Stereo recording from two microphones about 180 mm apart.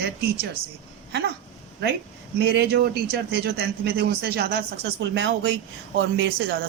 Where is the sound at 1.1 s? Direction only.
70° right (ahead or behind).